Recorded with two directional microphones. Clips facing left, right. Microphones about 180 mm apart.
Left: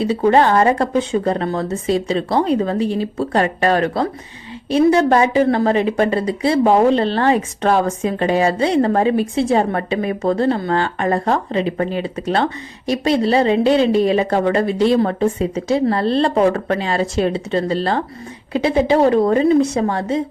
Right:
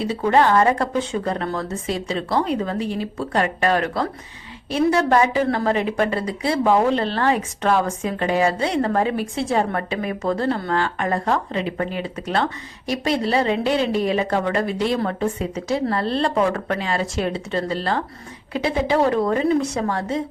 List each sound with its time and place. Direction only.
0.0 s a woman's voice: 30° left (ahead or behind)